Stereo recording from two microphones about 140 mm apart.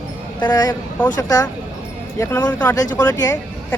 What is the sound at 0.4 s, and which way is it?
Speech, 30° left (ahead or behind).